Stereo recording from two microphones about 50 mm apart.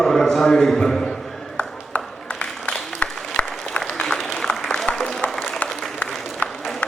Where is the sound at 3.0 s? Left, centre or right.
Left.